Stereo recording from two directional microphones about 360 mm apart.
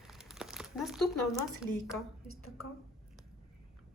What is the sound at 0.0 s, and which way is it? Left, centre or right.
Crumpling, centre.